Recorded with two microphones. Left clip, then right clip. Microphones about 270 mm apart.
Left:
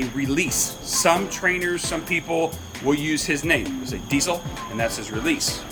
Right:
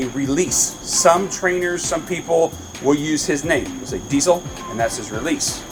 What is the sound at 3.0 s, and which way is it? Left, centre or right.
Speech, centre.